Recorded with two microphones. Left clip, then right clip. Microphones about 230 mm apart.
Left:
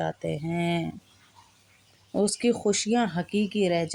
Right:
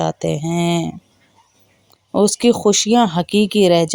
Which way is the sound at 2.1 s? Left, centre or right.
Right.